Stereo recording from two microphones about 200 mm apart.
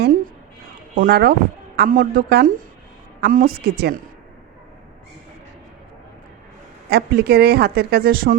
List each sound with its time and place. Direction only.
0.9 s speech: 50° right (ahead or behind)
6.9 s speech: 50° right (ahead or behind)